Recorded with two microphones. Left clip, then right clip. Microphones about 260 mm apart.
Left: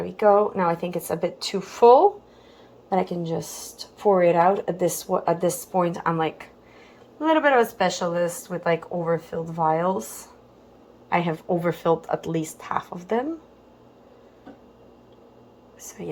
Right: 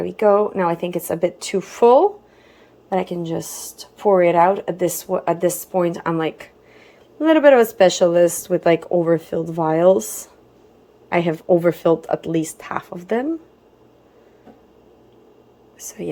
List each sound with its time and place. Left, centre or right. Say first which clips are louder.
0.0 s a woman's voice: right 3 dB; right
11.1 s speech: right 7 dB; centre
15.8 s speech: right 7 dB; centre